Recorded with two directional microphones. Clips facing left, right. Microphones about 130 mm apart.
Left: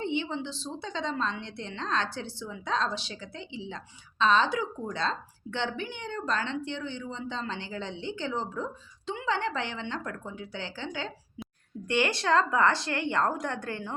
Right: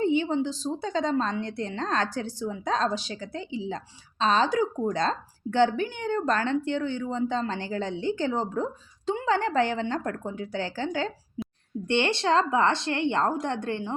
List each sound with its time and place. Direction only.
0.0 s a woman's voice: 40° right (ahead or behind)
11.9 s a woman's voice: 25° right (ahead or behind)